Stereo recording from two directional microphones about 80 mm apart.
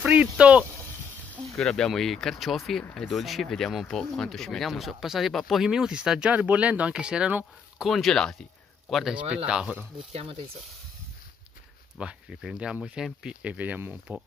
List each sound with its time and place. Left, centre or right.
0.0 s speech: centre
1.6 s speech: centre
7.8 s speech: centre
9.3 s speech: centre
12.0 s speech: centre